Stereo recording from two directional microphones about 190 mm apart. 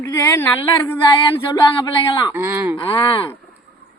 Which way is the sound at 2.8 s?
25° left (ahead or behind).